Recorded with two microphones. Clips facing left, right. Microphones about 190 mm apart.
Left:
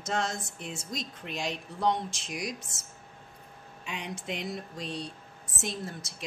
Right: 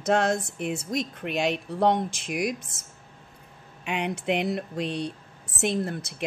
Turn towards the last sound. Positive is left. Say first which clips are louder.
# right 10 dB
turn(degrees=-60)  # may be behind; listen again after turning